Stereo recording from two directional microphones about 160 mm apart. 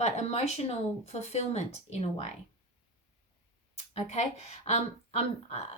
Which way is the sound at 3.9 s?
40° left (ahead or behind).